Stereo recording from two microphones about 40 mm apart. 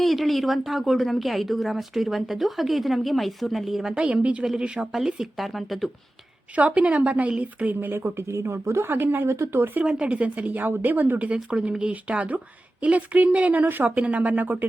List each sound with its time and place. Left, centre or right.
0.0 s speech: centre
3.9 s speech: right
4.9 s speech: centre
6.6 s speech: right
7.8 s speech: right
8.1 s speech: right
9.2 s speech: right
10.0 s speech: right
10.6 s a woman's voice: right
11.8 s a woman's voice: right
13.9 s speech: right